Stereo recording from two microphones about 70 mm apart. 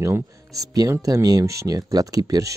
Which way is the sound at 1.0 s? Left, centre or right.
Right.